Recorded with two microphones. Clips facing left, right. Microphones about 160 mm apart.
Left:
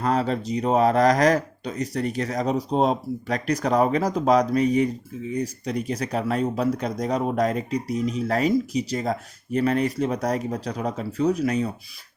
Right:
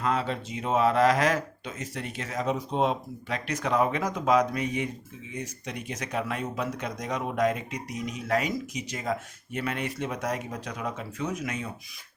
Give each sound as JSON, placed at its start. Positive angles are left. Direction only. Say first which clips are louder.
{"t": 0.0, "sound": "speech", "louder": "left 5 dB", "side_deg": 40}